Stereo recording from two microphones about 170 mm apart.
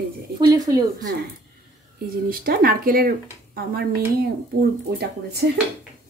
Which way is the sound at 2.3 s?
60° right (ahead or behind).